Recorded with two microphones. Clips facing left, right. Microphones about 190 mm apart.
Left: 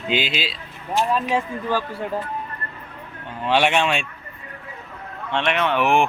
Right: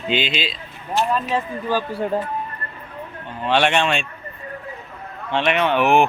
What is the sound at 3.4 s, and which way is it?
Speech, 10° left (ahead or behind).